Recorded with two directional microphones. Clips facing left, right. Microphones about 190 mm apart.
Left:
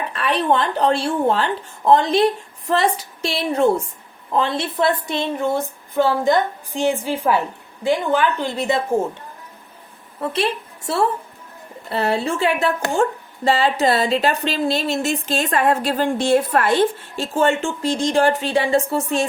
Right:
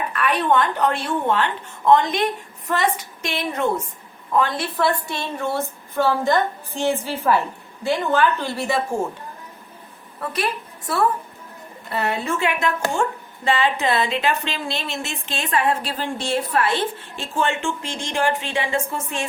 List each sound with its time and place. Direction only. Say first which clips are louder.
0.1 s a woman's voice: left 1 dB; 30° left (ahead or behind)
10.2 s a woman's voice: left 4 dB; 25° left (ahead or behind)